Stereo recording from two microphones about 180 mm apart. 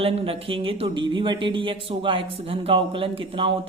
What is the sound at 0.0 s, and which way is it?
Speech, 30° right (ahead or behind).